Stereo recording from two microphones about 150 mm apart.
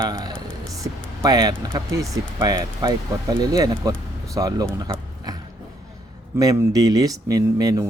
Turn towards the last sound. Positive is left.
turn(degrees=-25)  # may be behind; listen again after turning